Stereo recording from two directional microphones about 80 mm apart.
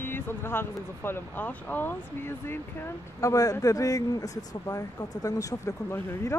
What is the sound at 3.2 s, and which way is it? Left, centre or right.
Speech, left.